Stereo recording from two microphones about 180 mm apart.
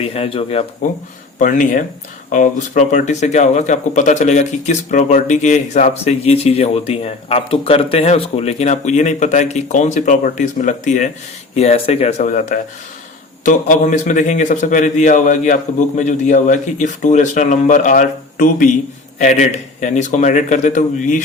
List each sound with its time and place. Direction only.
0.0 s speech: 30° left (ahead or behind)
1.4 s speech: 45° left (ahead or behind)